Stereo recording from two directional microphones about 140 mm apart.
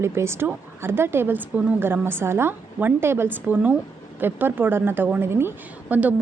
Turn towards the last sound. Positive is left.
turn(degrees=-10)  # may be behind; listen again after turning